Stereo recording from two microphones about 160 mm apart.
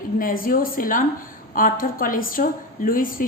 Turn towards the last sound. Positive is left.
turn(degrees=60)  # may be behind; listen again after turning